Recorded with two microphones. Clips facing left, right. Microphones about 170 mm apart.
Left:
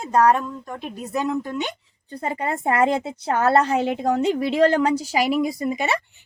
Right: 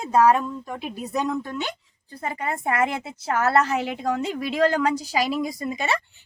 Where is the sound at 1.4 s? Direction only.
15° left (ahead or behind).